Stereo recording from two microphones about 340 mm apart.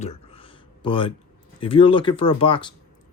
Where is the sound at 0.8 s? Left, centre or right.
Centre.